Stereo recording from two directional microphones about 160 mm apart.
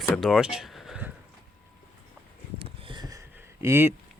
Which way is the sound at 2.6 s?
35° right (ahead or behind).